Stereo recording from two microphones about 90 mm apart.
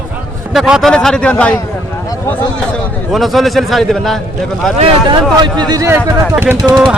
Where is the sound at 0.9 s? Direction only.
10° left (ahead or behind).